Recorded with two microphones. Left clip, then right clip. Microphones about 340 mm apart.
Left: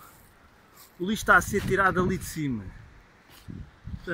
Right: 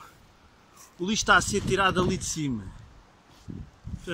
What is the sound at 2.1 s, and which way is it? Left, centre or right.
Speech, right.